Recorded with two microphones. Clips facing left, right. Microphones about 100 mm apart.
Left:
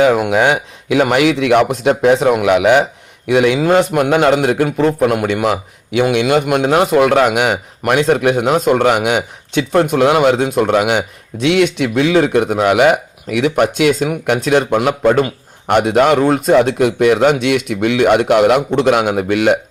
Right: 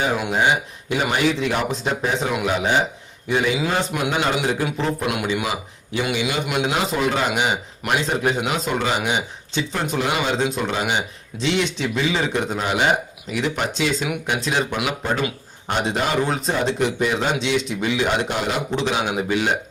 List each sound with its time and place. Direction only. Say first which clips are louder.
0.0 s speech: left 9 dB; 70° left (ahead or behind)
2.2 s a man's voice: left 10 dB; 65° left (ahead or behind)
3.6 s speech: left 10 dB; 60° left (ahead or behind)
5.0 s speech: left 9 dB; 50° left (ahead or behind); by 8.4 s 70° left (ahead or behind)
8.4 s speech: left 10 dB; 55° left (ahead or behind)